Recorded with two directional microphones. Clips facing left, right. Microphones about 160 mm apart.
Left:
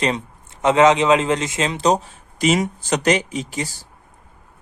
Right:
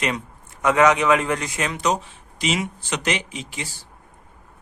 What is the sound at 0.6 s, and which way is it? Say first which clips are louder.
Speech: left 3 dB; 25° left (ahead or behind).